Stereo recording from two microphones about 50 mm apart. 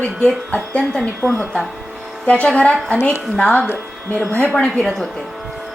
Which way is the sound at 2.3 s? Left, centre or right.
Left.